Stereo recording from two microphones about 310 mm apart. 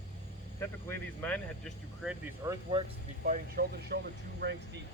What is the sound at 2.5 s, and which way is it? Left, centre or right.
Speech, centre.